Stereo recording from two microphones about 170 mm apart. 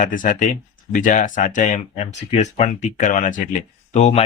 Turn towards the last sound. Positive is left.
turn(degrees=40)  # may be behind; listen again after turning